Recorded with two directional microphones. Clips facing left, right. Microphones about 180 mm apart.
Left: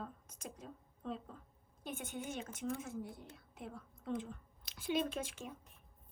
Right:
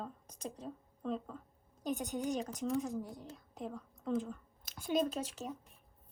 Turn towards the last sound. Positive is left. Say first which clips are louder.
# right 4 dB
turn(degrees=-35)  # may be behind; listen again after turning